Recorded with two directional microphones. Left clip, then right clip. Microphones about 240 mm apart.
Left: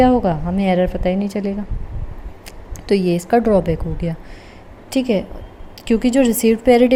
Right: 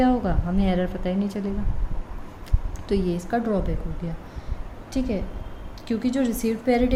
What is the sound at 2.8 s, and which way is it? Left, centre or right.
A woman's voice, left.